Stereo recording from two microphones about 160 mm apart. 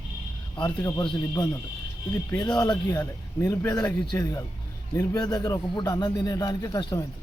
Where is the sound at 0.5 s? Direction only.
25° left (ahead or behind).